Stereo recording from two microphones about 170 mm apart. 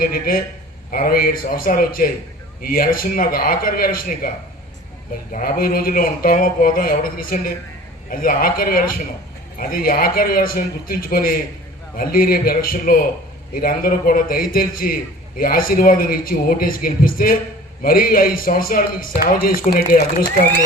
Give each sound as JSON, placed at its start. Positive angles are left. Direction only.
{"t": 0.0, "sound": "a man's voice", "side_deg": 55}
{"t": 5.3, "sound": "a man's voice", "side_deg": 55}